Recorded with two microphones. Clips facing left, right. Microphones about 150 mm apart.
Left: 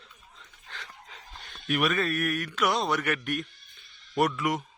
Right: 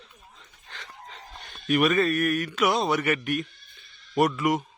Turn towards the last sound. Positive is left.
turn(degrees=0)  # may be behind; listen again after turning